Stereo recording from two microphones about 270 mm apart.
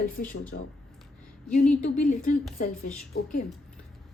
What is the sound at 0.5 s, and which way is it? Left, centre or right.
Speech, left.